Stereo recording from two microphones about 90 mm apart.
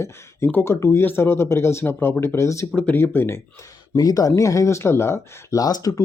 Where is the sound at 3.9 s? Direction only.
45° left (ahead or behind).